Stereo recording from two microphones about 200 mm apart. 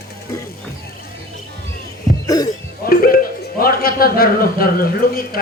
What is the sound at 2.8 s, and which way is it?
Music, 50° left (ahead or behind).